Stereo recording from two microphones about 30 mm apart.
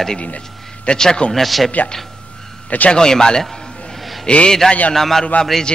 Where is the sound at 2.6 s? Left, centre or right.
Left.